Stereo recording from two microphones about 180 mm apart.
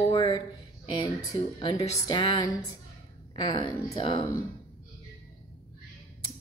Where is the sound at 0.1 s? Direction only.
25° left (ahead or behind).